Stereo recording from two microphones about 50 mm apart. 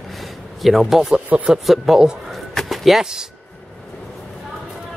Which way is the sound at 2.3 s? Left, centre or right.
Centre.